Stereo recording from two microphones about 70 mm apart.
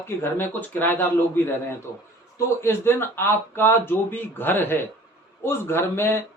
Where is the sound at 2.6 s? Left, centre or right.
Left.